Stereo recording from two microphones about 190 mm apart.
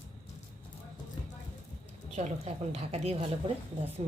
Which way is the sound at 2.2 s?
35° right (ahead or behind).